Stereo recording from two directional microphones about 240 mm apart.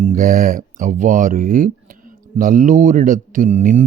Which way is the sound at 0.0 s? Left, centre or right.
Right.